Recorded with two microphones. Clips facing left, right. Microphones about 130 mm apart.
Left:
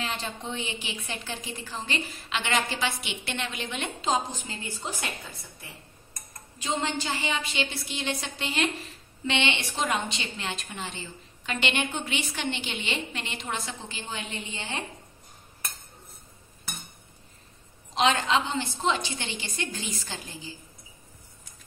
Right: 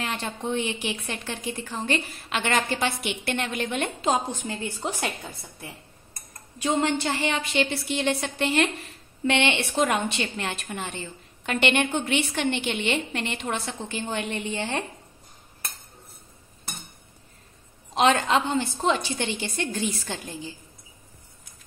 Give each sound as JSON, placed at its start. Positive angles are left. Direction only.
{"t": 0.0, "sound": "a woman's voice", "side_deg": -55}
{"t": 0.8, "sound": "a woman's voice", "side_deg": -65}
{"t": 6.6, "sound": "a woman's voice", "side_deg": -65}
{"t": 10.7, "sound": "a woman's voice", "side_deg": -45}
{"t": 11.4, "sound": "a woman's voice", "side_deg": -55}
{"t": 17.9, "sound": "a woman's voice", "side_deg": -50}